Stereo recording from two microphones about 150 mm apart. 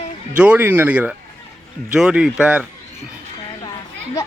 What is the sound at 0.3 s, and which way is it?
Speech, 10° right (ahead or behind).